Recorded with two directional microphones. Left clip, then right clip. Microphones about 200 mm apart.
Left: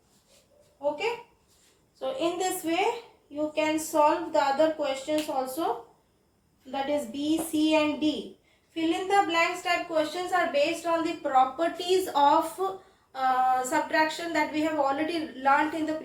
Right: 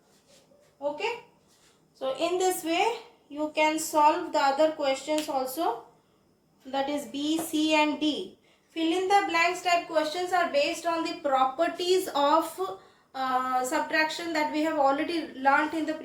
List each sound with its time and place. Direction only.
2.0 s a woman's voice: 35° right (ahead or behind); by 15.8 s 15° right (ahead or behind)